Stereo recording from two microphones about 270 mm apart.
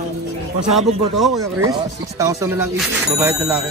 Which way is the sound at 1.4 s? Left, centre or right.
Centre.